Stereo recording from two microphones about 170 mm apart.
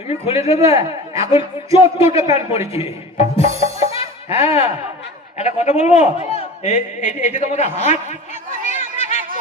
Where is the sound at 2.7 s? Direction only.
35° left (ahead or behind).